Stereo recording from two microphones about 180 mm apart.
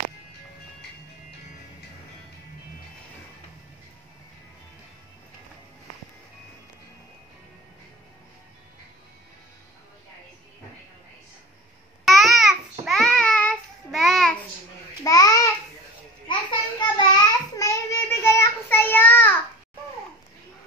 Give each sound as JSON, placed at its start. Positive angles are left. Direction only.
{"t": 12.0, "sound": "babbling", "side_deg": 0}
{"t": 12.8, "sound": "child singing", "side_deg": 5}
{"t": 15.0, "sound": "babbling", "side_deg": 20}
{"t": 16.3, "sound": "a sound", "side_deg": 25}